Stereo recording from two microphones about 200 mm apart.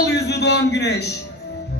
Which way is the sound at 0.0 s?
55° left (ahead or behind).